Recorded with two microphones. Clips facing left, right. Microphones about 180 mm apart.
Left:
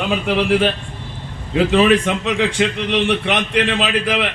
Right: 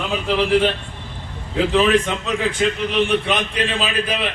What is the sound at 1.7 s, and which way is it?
A man's voice, 75° left (ahead or behind).